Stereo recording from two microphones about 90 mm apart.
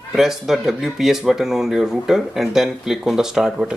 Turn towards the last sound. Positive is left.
turn(degrees=-5)  # may be behind; listen again after turning